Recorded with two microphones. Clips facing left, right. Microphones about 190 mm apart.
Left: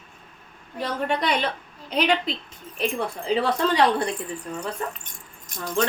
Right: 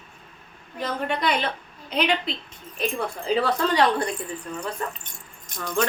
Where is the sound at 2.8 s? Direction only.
25° left (ahead or behind).